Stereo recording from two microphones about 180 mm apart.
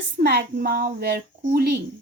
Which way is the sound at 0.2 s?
60° right (ahead or behind).